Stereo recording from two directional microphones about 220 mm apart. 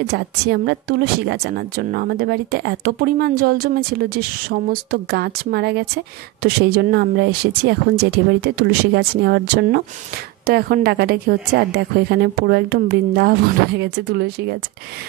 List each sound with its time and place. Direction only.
0.0 s a woman's voice: 45° right (ahead or behind)